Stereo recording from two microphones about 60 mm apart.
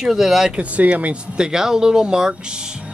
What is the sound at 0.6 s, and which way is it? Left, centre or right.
Speech, right.